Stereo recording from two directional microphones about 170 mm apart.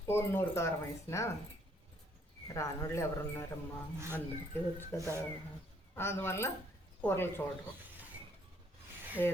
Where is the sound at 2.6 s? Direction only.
15° left (ahead or behind).